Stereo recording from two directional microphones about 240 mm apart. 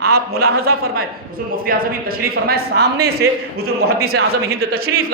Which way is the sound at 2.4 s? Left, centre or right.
Right.